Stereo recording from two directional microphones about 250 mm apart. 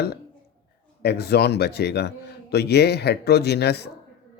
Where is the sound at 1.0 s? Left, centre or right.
Left.